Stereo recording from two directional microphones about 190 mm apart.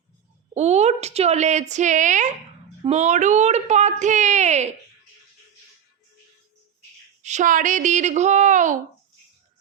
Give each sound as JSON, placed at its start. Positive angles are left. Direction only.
{"t": 0.5, "sound": "a woman's voice", "side_deg": -35}
{"t": 7.2, "sound": "a woman's voice", "side_deg": -40}